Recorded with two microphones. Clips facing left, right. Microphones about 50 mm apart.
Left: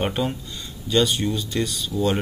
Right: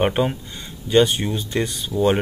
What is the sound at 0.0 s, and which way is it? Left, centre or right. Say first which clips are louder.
Speech: right 5 dB; right.